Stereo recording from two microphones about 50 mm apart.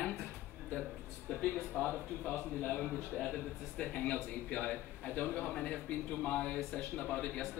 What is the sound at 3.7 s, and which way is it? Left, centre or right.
A man's voice, centre.